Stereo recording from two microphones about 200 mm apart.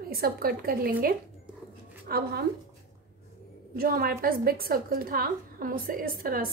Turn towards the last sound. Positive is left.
turn(degrees=-45)  # may be behind; listen again after turning